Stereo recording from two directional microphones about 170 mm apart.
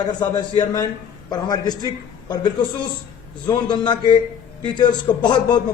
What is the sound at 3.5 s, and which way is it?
A man's voice, 25° left (ahead or behind).